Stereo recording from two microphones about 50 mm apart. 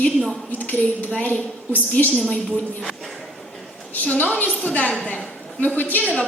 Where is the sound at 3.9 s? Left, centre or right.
Left.